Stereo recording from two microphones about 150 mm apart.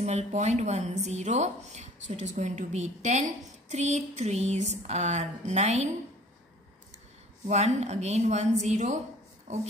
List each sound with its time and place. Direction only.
0.0 s a woman's voice: 50° right (ahead or behind)
7.4 s a woman's voice: 50° right (ahead or behind)